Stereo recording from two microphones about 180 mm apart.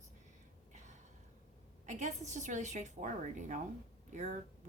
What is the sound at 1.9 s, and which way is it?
A woman's voice, 40° right (ahead or behind).